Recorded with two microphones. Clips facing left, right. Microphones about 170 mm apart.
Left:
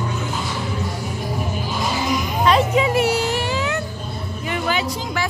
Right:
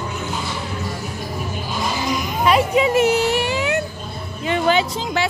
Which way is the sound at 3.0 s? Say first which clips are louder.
Right 3 dB; 20° right (ahead or behind).